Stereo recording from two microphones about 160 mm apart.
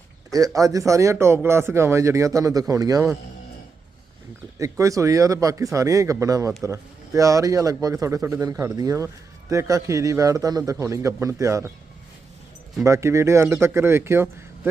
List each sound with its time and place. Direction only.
0.3 s a man's voice: 20° right (ahead or behind)
4.5 s a man's voice: 20° right (ahead or behind)
12.8 s speech: 20° right (ahead or behind)